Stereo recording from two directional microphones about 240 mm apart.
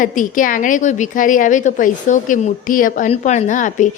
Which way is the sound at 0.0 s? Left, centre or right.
Left.